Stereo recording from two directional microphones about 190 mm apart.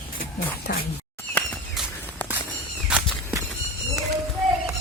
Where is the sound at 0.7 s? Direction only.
50° left (ahead or behind).